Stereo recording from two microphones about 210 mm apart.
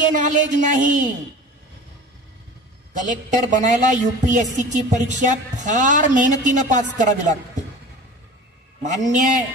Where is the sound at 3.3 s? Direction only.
35° right (ahead or behind).